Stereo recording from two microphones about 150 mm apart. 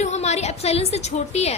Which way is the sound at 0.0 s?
50° left (ahead or behind).